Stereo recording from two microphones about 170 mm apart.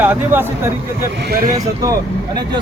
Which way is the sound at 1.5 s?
20° right (ahead or behind).